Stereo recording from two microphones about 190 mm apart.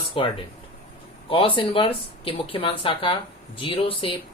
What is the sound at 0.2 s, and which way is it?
Speech, 30° left (ahead or behind).